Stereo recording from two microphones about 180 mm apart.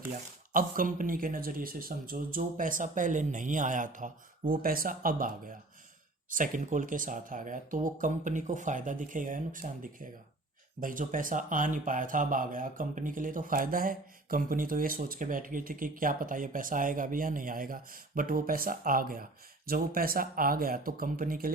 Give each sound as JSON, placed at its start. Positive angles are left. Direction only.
{"t": 0.5, "sound": "speech", "side_deg": -50}
{"t": 6.3, "sound": "speech", "side_deg": -45}